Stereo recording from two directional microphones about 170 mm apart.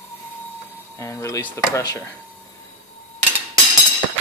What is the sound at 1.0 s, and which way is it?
Speech, 20° left (ahead or behind).